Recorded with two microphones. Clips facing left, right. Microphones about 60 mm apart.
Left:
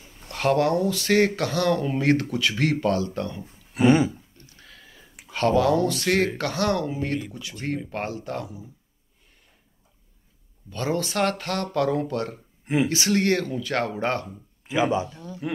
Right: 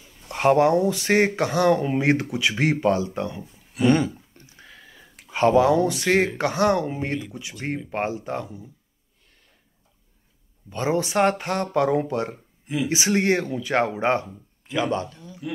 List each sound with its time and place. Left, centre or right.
0.3 s speech: right
3.8 s speech: centre
4.4 s a sound: centre
4.8 s a sound: centre
5.3 s speech: right
10.7 s speech: centre
12.6 s speech: left
12.9 s speech: centre
14.7 s speech: centre
15.4 s speech: left